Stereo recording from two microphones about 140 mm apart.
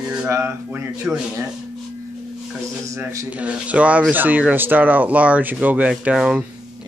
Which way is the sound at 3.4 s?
10° right (ahead or behind).